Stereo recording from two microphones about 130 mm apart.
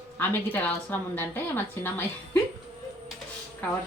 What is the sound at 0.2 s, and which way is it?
A woman's voice, 15° left (ahead or behind).